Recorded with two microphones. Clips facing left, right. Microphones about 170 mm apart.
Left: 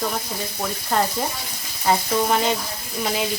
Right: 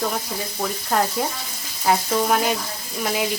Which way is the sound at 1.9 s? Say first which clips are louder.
Even; 5° right (ahead or behind).